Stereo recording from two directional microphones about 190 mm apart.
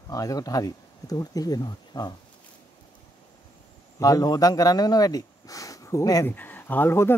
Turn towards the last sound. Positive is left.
turn(degrees=10)  # may be behind; listen again after turning